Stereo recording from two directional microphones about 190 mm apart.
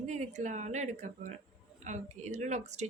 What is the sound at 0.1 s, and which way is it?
Speech, 40° right (ahead or behind).